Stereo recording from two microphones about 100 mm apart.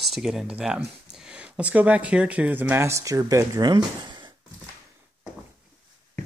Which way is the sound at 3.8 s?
50° right (ahead or behind).